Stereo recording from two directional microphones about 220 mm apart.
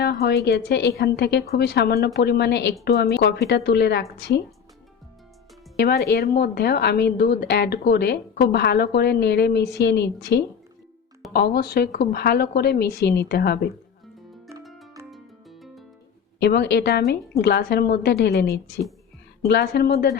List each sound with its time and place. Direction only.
0.0 s a woman's voice: 45° left (ahead or behind)
6.1 s a woman's voice: 45° left (ahead or behind)
14.6 s music: centre (ahead or behind)
16.4 s a woman's voice: 50° left (ahead or behind)